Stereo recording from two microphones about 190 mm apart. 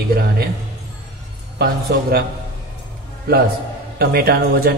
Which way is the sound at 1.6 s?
55° right (ahead or behind).